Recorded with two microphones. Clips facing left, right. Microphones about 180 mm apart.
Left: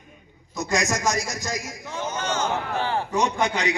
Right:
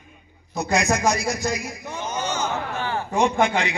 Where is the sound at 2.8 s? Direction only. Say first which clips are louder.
Right 2 dB; 35° left (ahead or behind).